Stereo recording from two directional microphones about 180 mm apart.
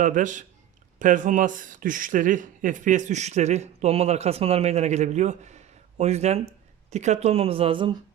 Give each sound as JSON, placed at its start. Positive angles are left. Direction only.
{"t": 0.0, "sound": "speech", "side_deg": -45}